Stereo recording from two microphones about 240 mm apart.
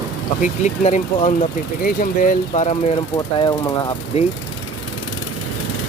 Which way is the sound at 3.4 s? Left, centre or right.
Centre.